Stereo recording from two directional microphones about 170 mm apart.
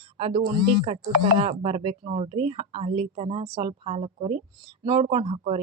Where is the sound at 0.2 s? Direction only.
35° right (ahead or behind).